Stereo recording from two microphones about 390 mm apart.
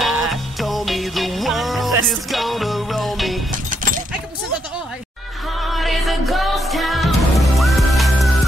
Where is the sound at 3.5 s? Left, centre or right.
Centre.